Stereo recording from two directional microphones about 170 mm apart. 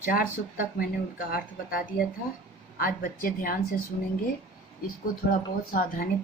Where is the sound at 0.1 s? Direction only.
55° left (ahead or behind).